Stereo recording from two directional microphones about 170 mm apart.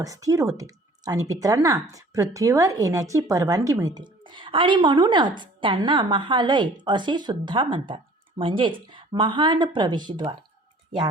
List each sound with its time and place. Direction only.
0.0 s speech: 20° right (ahead or behind)